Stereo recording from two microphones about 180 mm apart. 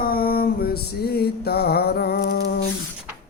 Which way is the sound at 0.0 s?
55° left (ahead or behind).